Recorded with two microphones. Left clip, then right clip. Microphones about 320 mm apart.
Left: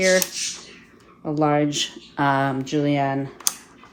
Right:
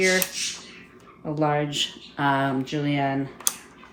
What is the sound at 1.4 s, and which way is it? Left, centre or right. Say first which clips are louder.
Speech: left 3 dB; centre.